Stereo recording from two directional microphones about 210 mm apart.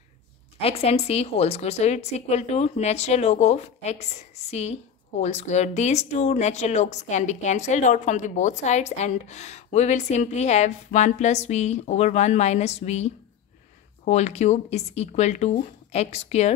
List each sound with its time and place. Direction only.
0.6 s speech: 30° left (ahead or behind)